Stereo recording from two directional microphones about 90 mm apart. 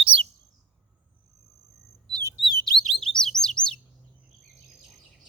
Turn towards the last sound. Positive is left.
turn(degrees=5)  # may be behind; listen again after turning